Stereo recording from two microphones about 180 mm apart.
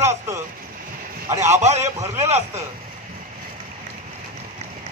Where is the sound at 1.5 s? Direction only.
40° right (ahead or behind).